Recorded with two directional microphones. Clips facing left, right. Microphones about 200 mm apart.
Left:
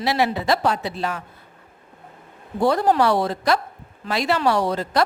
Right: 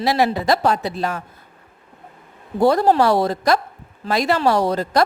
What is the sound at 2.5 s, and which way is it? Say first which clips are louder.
A woman's voice: right 3 dB; 40° right (ahead or behind).